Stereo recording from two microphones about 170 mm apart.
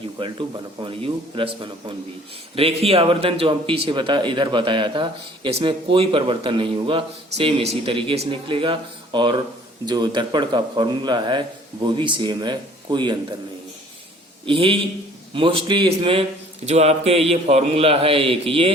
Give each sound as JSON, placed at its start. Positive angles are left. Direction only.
{"t": 0.2, "sound": "a man's voice", "side_deg": -25}
{"t": 14.4, "sound": "speech", "side_deg": -30}